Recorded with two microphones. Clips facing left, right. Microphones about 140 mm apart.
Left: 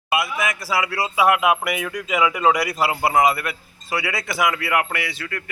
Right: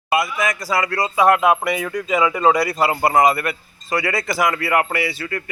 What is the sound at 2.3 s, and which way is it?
Speech, 30° right (ahead or behind).